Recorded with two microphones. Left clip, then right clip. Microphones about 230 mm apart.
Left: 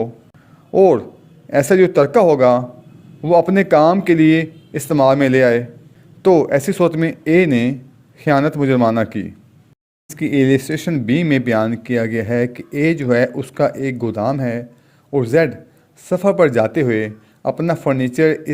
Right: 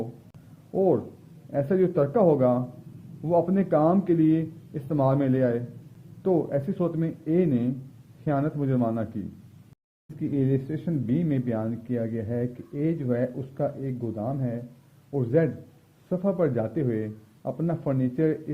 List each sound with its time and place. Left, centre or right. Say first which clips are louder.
0.8 s speech: left 12 dB; left
10.2 s speech: left 12 dB; left